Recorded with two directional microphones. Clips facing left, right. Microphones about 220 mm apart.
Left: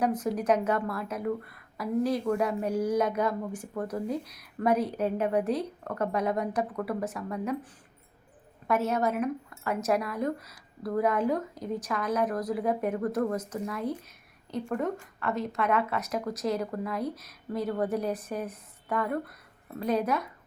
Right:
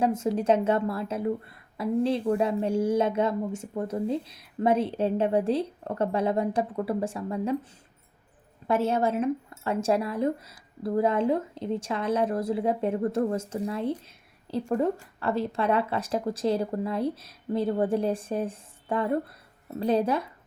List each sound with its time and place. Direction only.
0.0 s speech: 25° right (ahead or behind)